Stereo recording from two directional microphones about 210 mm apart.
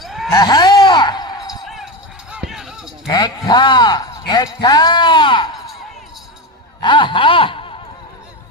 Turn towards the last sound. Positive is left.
turn(degrees=25)  # may be behind; listen again after turning